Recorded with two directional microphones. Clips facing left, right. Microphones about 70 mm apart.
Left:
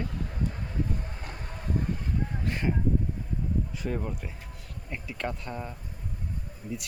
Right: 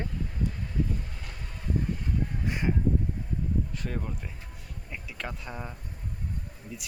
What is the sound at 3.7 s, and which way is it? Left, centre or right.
Speech, centre.